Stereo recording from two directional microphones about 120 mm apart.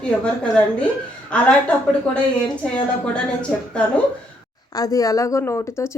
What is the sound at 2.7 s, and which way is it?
A woman's voice, 10° left (ahead or behind).